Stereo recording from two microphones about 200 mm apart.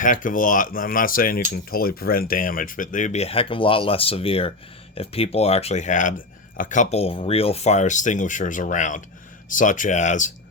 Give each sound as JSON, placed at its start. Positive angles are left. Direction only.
{"t": 0.0, "sound": "speech", "side_deg": 40}